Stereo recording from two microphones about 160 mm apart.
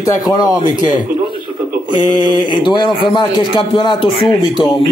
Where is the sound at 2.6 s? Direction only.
30° left (ahead or behind).